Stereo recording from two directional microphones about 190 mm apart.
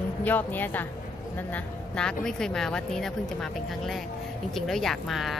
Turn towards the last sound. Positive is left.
turn(degrees=0)  # may be behind; listen again after turning